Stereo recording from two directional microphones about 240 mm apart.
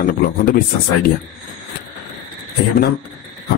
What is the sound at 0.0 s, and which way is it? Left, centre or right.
Speech, left.